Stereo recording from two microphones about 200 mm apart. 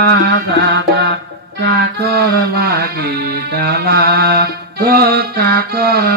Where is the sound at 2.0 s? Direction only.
55° right (ahead or behind).